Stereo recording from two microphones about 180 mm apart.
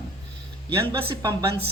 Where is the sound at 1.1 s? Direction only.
20° right (ahead or behind).